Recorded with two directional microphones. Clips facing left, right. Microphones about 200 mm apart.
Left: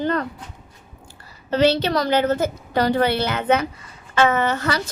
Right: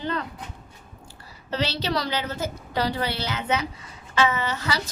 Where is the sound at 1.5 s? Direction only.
55° left (ahead or behind).